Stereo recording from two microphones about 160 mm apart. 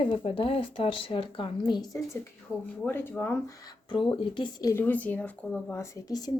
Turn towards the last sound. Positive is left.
turn(degrees=25)  # may be behind; listen again after turning